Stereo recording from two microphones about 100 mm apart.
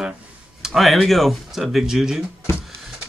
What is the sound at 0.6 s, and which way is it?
Speech, centre (ahead or behind).